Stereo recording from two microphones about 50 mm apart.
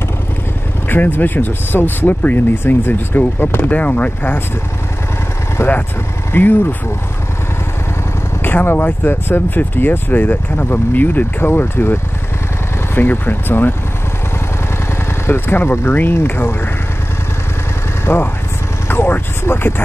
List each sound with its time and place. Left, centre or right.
0.8 s speech: left
3.6 s speech: left
5.6 s speech: left
6.3 s speech: left
8.4 s speech: left
15.2 s speech: left
18.0 s speech: left